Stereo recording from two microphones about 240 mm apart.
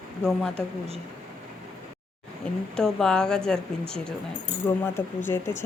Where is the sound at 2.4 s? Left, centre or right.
Centre.